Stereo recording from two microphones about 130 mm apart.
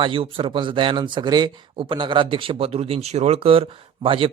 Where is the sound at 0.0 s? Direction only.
40° right (ahead or behind).